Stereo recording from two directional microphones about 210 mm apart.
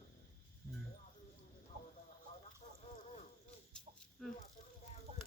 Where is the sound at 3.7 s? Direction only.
Centre (ahead or behind).